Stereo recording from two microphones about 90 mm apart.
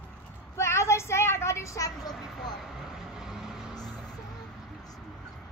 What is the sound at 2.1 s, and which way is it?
Vehicle, centre (ahead or behind).